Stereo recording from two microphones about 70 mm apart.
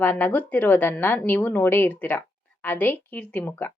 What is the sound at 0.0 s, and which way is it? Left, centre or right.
A woman's voice, left.